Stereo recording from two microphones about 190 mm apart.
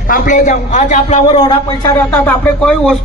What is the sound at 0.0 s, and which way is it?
A man's voice, 45° left (ahead or behind).